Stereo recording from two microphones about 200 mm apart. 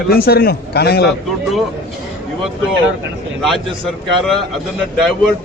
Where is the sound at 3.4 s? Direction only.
Centre (ahead or behind).